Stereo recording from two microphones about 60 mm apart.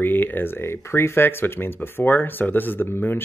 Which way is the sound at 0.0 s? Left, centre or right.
Left.